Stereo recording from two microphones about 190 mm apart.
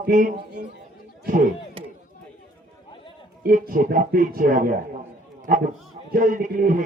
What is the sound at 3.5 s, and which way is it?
Speech, 45° right (ahead or behind).